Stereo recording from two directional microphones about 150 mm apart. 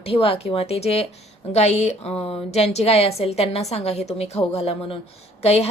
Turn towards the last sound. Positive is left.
turn(degrees=45)  # may be behind; listen again after turning